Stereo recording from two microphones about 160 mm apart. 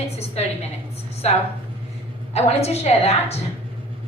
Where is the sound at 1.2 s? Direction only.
40° left (ahead or behind).